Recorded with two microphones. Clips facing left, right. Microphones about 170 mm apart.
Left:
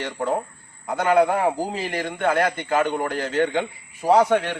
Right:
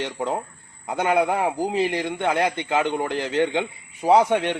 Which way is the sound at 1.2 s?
10° right (ahead or behind).